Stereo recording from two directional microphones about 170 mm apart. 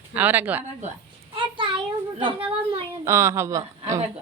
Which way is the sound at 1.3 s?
30° right (ahead or behind).